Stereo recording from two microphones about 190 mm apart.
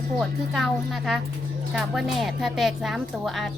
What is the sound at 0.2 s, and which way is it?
Speech, centre (ahead or behind).